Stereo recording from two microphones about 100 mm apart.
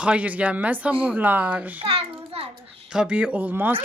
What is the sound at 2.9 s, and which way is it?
Speech, 10° right (ahead or behind).